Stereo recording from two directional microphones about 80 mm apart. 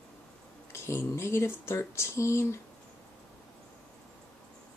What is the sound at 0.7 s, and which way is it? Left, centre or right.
Speech, left.